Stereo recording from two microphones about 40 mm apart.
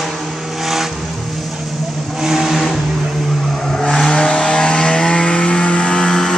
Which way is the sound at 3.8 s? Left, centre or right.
Centre.